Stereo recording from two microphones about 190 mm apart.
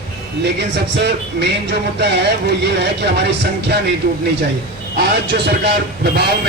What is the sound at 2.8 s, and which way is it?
Speech, 65° right (ahead or behind).